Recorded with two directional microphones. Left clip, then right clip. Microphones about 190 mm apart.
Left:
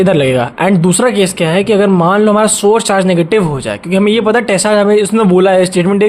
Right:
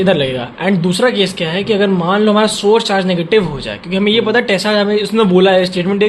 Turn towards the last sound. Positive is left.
turn(degrees=45)  # may be behind; listen again after turning